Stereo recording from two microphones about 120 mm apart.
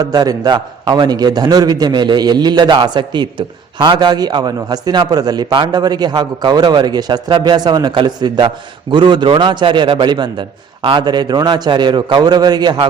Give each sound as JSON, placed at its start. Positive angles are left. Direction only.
{"t": 0.0, "sound": "a man's voice", "side_deg": -30}